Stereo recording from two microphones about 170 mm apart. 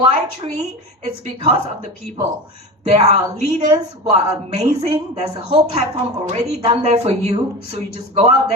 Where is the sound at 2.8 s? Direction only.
40° right (ahead or behind).